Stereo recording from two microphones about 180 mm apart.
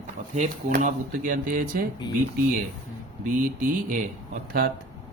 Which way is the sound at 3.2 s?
45° right (ahead or behind).